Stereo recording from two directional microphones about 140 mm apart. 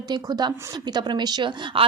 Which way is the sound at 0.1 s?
30° right (ahead or behind).